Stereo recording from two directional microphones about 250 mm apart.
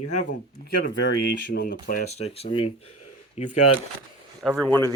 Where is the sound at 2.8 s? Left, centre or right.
Left.